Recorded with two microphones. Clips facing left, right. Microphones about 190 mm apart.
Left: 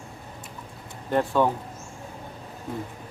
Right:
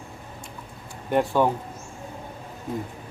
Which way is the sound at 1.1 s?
15° right (ahead or behind).